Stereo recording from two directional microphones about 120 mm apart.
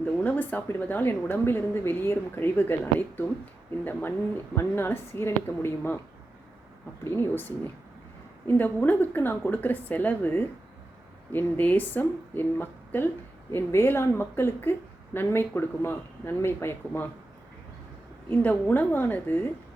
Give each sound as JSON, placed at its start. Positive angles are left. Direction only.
{"t": 0.0, "sound": "a woman's voice", "side_deg": 15}
{"t": 4.5, "sound": "a woman's voice", "side_deg": 20}
{"t": 7.0, "sound": "a woman's voice", "side_deg": 20}
{"t": 18.3, "sound": "a woman's voice", "side_deg": 15}